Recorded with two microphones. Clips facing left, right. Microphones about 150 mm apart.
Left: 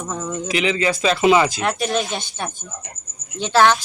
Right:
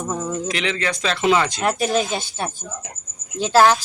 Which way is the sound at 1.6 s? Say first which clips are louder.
Right 1 dB; 5° right (ahead or behind).